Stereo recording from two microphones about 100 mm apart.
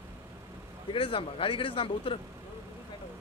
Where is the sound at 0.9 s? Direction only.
60° left (ahead or behind).